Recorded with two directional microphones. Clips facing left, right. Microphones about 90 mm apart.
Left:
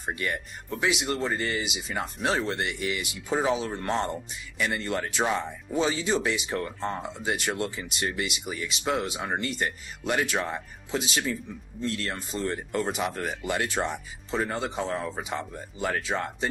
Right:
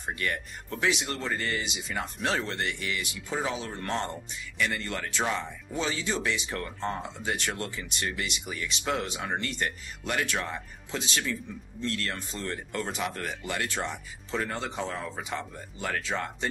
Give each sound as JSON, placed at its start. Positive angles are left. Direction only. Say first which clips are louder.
{"t": 0.0, "sound": "speech", "louder": "left 1 dB", "side_deg": 15}
{"t": 2.5, "sound": "speech", "louder": "left 3 dB", "side_deg": 20}